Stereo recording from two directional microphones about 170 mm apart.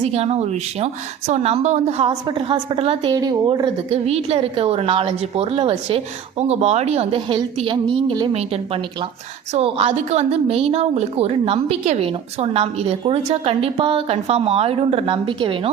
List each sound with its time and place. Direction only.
0.0 s a woman's voice: 35° right (ahead or behind)
9.6 s a woman's voice: 35° right (ahead or behind)